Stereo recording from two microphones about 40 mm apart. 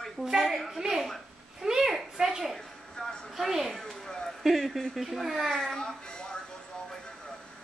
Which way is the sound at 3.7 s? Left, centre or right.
Centre.